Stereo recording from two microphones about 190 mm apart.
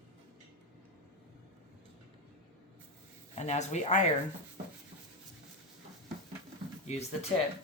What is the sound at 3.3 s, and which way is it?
Speech, 35° left (ahead or behind).